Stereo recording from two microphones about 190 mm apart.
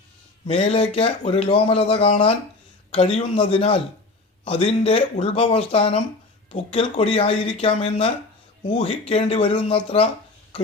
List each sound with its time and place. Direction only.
0.4 s speech: 30° left (ahead or behind)